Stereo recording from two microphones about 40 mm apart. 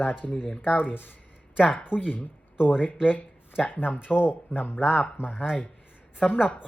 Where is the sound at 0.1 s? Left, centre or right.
Left.